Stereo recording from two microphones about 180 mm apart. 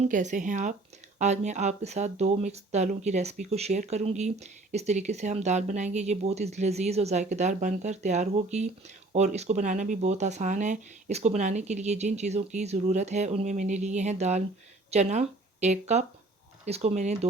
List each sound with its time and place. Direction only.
0.0 s speech: 40° right (ahead or behind)